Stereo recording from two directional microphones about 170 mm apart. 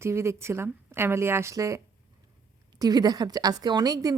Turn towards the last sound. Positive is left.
turn(degrees=-20)  # may be behind; listen again after turning